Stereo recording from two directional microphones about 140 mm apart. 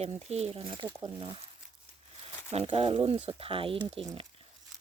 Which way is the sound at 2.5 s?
45° right (ahead or behind).